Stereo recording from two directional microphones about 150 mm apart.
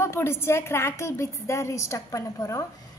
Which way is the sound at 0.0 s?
15° left (ahead or behind).